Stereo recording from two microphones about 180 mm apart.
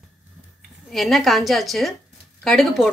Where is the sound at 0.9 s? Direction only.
Centre (ahead or behind).